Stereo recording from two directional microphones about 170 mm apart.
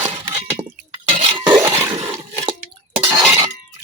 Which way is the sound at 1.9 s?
30° right (ahead or behind).